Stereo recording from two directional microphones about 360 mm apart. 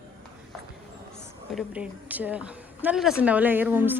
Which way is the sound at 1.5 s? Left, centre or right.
Centre.